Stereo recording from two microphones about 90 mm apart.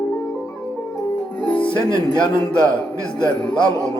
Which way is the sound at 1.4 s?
15° left (ahead or behind).